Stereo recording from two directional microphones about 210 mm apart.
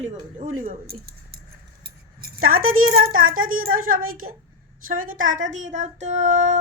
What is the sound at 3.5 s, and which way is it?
Speech, 45° right (ahead or behind).